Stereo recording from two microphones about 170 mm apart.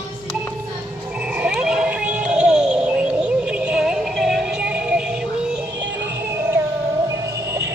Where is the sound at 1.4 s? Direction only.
5° right (ahead or behind).